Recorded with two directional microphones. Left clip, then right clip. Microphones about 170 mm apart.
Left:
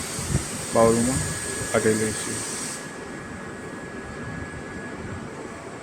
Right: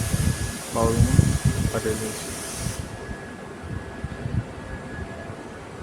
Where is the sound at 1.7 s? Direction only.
15° left (ahead or behind).